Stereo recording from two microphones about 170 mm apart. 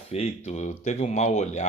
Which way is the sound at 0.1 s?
40° left (ahead or behind).